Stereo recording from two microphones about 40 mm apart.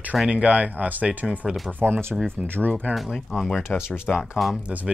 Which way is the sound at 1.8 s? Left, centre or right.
Right.